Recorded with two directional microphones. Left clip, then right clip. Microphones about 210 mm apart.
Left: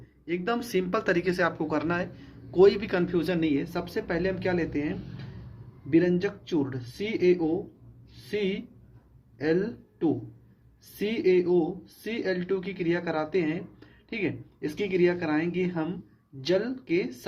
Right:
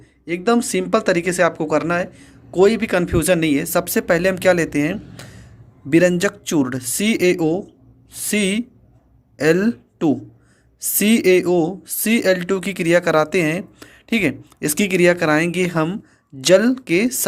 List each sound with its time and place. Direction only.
0.3 s speech: 35° right (ahead or behind); by 17.1 s 50° right (ahead or behind)